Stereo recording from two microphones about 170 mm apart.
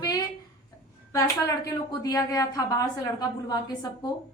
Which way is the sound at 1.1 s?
20° left (ahead or behind).